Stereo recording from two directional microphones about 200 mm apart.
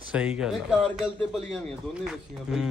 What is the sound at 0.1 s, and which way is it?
Speech, 5° right (ahead or behind).